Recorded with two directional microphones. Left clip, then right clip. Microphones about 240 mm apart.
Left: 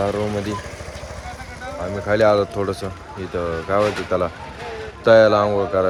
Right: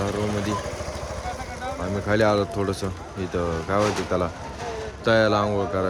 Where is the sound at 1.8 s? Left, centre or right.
Centre.